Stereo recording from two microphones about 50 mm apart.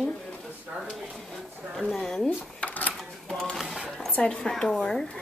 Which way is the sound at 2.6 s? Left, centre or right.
Left.